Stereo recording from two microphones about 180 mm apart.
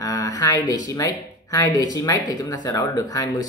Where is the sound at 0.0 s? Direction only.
20° left (ahead or behind).